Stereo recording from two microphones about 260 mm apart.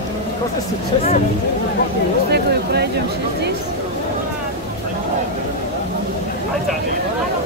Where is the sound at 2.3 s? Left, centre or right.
Right.